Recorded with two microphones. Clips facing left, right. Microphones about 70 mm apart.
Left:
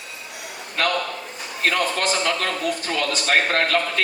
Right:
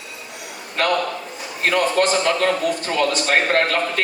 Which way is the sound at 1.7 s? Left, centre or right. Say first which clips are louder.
Right 4 dB; right.